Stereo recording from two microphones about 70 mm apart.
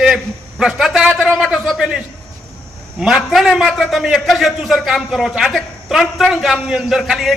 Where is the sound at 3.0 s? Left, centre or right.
Centre.